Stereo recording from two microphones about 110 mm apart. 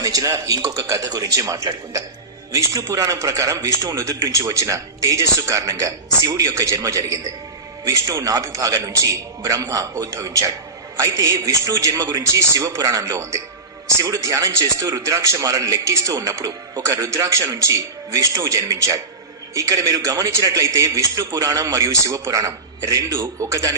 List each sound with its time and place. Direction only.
0.0 s a man's voice: 30° right (ahead or behind)